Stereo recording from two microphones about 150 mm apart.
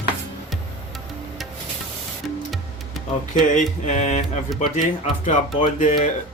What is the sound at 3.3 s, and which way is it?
Speech, 55° left (ahead or behind).